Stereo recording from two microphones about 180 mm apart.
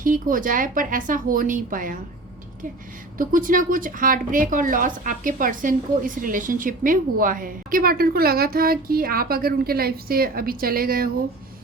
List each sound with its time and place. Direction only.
0.0 s a woman's voice: 50° right (ahead or behind)
3.2 s a woman's voice: 50° right (ahead or behind)